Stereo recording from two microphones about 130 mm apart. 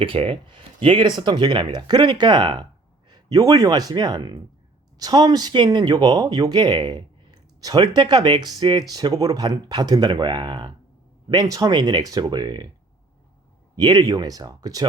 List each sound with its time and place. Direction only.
0.0 s speech: 45° right (ahead or behind)
13.7 s speech: 30° right (ahead or behind)